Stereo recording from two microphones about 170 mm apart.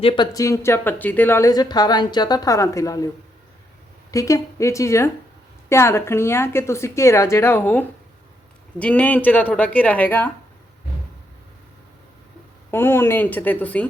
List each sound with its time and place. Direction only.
0.0 s a woman's voice: 30° left (ahead or behind)
4.1 s a woman's voice: 20° left (ahead or behind)
12.7 s a woman's voice: 15° left (ahead or behind)